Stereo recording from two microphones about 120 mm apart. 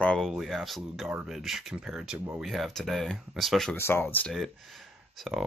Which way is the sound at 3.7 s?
20° left (ahead or behind).